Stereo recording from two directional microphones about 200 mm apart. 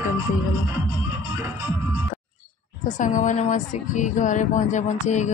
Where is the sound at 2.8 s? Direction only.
40° left (ahead or behind).